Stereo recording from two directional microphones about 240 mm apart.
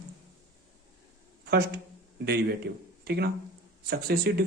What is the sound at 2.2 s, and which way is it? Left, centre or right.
Speech, right.